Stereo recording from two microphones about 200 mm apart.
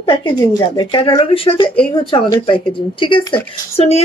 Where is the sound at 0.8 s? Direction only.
25° left (ahead or behind).